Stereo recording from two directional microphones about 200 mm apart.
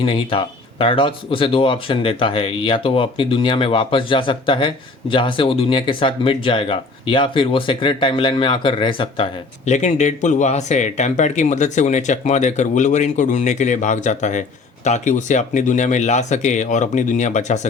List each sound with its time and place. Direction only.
0.0 s speech: 25° left (ahead or behind)